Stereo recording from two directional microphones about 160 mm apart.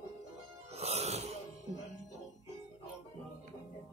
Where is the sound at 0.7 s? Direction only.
40° right (ahead or behind).